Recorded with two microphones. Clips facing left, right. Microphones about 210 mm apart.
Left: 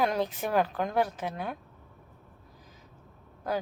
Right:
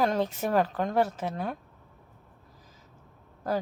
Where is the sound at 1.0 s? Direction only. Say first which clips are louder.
Right 2 dB; 30° right (ahead or behind).